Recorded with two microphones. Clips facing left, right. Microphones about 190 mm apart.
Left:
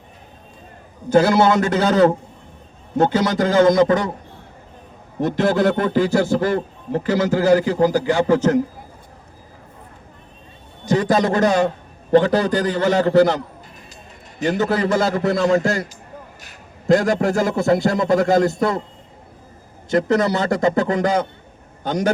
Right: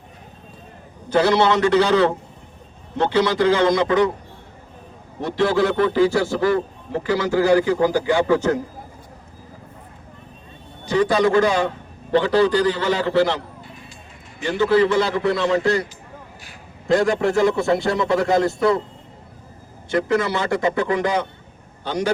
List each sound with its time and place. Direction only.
1.1 s a man's voice: 45° left (ahead or behind)
5.2 s a man's voice: 45° left (ahead or behind)
10.8 s a man's voice: 45° left (ahead or behind)
19.9 s a man's voice: 45° left (ahead or behind)